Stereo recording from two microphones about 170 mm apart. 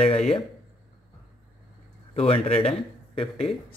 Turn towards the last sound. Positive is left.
turn(degrees=35)  # may be behind; listen again after turning